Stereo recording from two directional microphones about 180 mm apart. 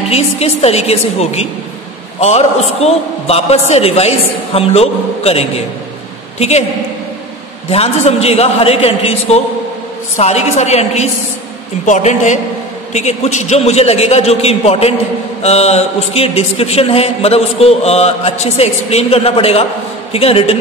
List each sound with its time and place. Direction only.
0.1 s mantra: 35° left (ahead or behind)
4.6 s a man's voice: 35° left (ahead or behind)
7.7 s mantra: 35° left (ahead or behind)